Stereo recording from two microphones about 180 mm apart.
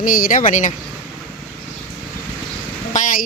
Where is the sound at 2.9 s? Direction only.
45° left (ahead or behind).